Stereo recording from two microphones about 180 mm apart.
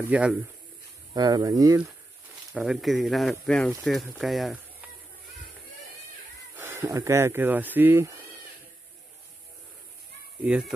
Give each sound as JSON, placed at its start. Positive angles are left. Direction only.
{"t": 0.0, "sound": "speech", "side_deg": -5}
{"t": 1.1, "sound": "speech", "side_deg": -20}
{"t": 2.5, "sound": "speech", "side_deg": -5}
{"t": 6.5, "sound": "speech", "side_deg": -15}
{"t": 10.4, "sound": "speech", "side_deg": -5}